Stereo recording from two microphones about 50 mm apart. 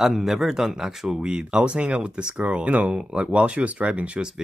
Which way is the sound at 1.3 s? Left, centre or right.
Centre.